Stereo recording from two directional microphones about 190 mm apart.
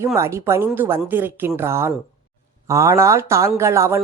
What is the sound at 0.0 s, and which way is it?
Speech, 15° right (ahead or behind).